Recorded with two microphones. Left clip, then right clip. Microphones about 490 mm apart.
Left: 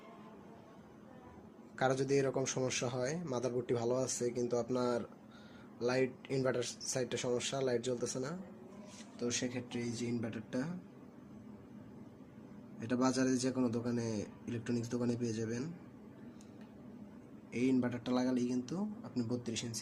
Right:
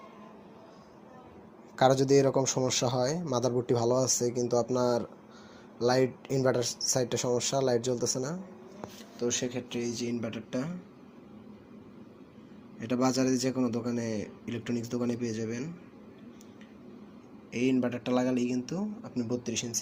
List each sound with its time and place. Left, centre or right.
1.7 s speech: left
12.8 s speech: left
17.5 s speech: left